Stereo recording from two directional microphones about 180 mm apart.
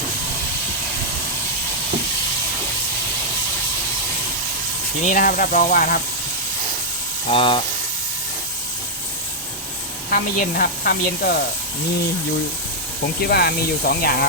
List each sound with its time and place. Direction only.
5.0 s speech: 50° left (ahead or behind)
7.3 s speech: 30° left (ahead or behind)
10.1 s speech: 50° left (ahead or behind)
13.2 s speech: 60° left (ahead or behind)